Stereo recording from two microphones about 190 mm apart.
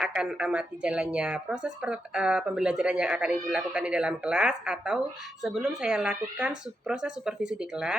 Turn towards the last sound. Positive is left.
turn(degrees=-5)  # may be behind; listen again after turning